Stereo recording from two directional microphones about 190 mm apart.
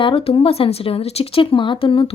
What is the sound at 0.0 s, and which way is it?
A woman's voice, 30° left (ahead or behind).